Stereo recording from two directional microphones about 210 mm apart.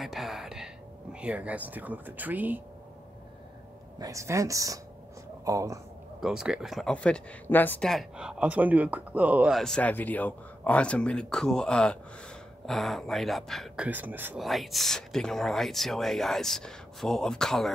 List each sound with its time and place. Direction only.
0.0 s a sound: centre (ahead or behind)
1.1 s speech: 5° right (ahead or behind)
4.0 s speech: 15° right (ahead or behind)
6.2 s speech: 5° right (ahead or behind)